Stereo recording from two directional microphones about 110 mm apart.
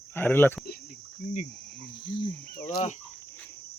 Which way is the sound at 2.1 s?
45° left (ahead or behind).